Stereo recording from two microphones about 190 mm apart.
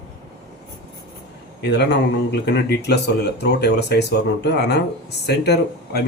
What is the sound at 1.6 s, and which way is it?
Speech, 65° left (ahead or behind).